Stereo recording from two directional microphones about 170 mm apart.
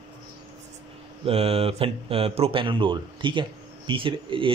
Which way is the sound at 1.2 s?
35° right (ahead or behind).